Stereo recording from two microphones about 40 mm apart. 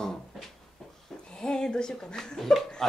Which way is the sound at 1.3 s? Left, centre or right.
Left.